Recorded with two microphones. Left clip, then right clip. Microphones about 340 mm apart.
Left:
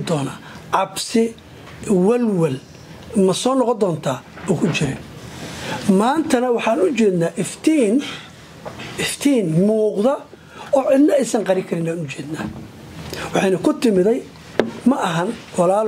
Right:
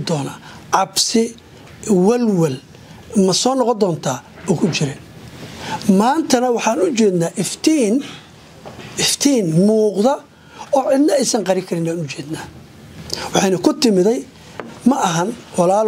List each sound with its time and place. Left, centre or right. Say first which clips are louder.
0.0 s a woman's voice: even; right
5.9 s speech: right 2 dB; right
8.9 s speech: right 3 dB; right
13.1 s a sound: right 2 dB; right
13.7 s speech: right 2 dB; right